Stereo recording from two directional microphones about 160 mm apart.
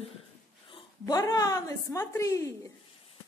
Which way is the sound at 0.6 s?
30° left (ahead or behind).